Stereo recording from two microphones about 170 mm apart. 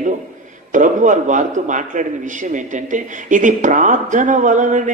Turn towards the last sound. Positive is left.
turn(degrees=-50)  # may be behind; listen again after turning